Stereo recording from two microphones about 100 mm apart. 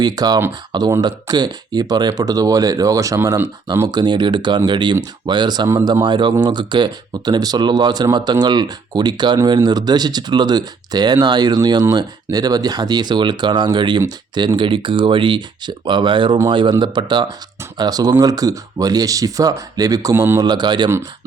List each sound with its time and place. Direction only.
0.0 s speech: 40° right (ahead or behind)
3.9 s speech: 50° right (ahead or behind)
20.4 s speech: 45° right (ahead or behind)